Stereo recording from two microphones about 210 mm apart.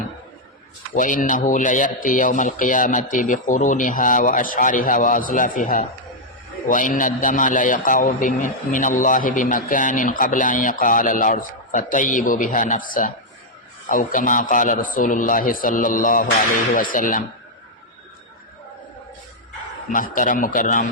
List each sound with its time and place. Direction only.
0.9 s a man's voice: 40° left (ahead or behind)
19.9 s a man's voice: 40° left (ahead or behind)